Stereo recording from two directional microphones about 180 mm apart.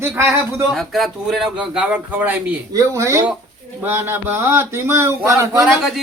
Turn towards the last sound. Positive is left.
turn(degrees=0)  # may be behind; listen again after turning